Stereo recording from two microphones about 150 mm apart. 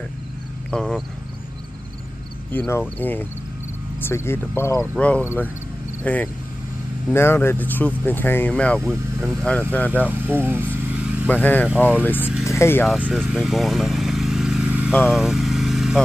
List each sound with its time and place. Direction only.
0.7 s speech: centre (ahead or behind)
2.5 s speech: 10° left (ahead or behind)
10.0 s speech: 10° right (ahead or behind)
11.2 s speech: 10° left (ahead or behind)
12.4 s vehicle: 15° left (ahead or behind)
13.0 s vehicle: 5° right (ahead or behind)
14.9 s vehicle: 5° left (ahead or behind)